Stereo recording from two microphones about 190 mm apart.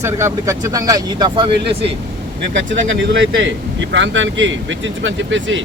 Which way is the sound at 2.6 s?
80° right.